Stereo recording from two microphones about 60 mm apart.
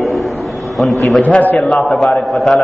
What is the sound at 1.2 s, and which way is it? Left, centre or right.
Speech, left.